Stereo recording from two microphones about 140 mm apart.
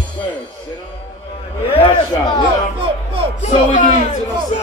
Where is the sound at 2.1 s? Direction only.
30° left (ahead or behind).